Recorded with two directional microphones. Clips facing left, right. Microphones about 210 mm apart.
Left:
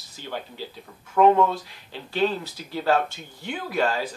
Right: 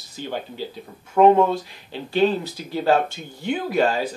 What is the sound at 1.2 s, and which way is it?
Speech, 25° right (ahead or behind).